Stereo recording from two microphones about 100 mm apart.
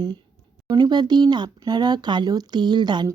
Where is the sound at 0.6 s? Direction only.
45° right (ahead or behind).